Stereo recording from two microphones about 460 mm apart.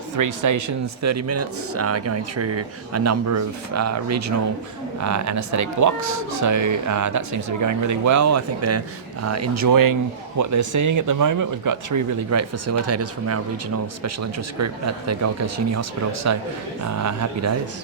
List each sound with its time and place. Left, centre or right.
0.2 s a man's voice: right